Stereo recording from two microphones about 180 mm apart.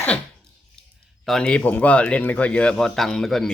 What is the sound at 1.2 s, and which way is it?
Speech, centre (ahead or behind).